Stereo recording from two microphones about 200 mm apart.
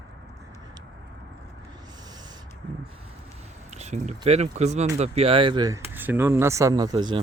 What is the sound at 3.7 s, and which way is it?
Speech, 35° right (ahead or behind).